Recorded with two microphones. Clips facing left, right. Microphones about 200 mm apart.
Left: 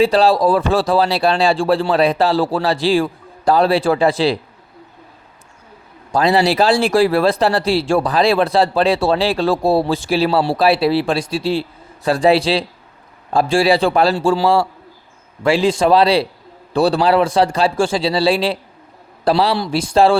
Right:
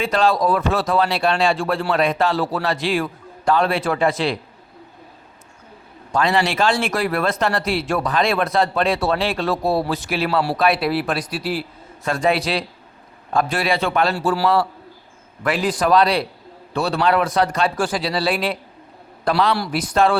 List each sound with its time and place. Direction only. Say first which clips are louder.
0.0 s speech: left 5 dB; 35° left (ahead or behind)
6.1 s a man's voice: left 5 dB; 35° left (ahead or behind)